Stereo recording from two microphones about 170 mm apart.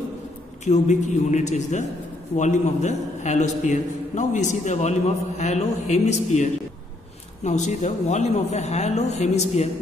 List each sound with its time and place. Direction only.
0.7 s a man's voice: 45° left (ahead or behind)